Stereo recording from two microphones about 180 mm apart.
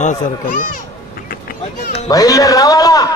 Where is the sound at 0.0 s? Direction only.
45° left (ahead or behind).